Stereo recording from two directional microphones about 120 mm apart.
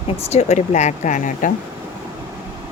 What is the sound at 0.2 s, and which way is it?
Speech, 60° left (ahead or behind).